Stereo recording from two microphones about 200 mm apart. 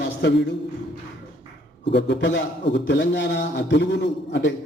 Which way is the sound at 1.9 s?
60° left (ahead or behind).